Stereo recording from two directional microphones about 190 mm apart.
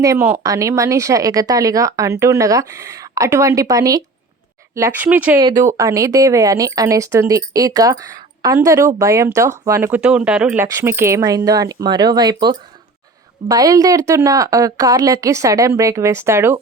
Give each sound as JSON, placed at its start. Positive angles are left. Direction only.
{"t": 0.0, "sound": "speech", "side_deg": -15}
{"t": 5.4, "sound": "speech", "side_deg": -20}